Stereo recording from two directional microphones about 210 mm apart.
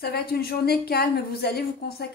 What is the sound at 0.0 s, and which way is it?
A woman's voice, 50° left (ahead or behind).